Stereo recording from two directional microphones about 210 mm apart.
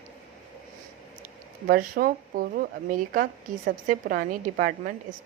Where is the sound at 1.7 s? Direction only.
45° right (ahead or behind).